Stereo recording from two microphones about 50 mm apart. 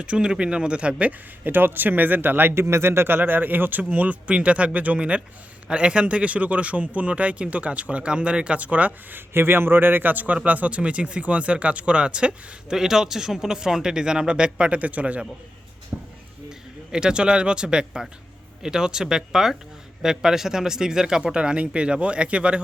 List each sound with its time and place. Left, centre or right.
0.0 s a man's voice: right
1.5 s speech: right
2.6 s speech: right
3.2 s a man's voice: right
9.1 s a man's voice: right
15.9 s speech: centre